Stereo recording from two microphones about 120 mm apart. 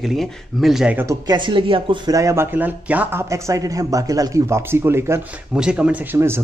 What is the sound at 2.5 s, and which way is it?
Speech, 15° right (ahead or behind).